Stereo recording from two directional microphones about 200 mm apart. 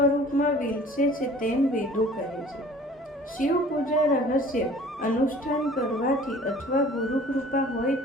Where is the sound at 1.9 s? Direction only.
Centre (ahead or behind).